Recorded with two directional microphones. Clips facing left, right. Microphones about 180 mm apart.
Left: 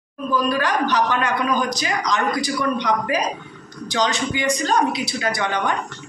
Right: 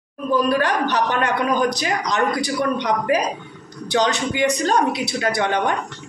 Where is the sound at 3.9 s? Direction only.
60° right (ahead or behind).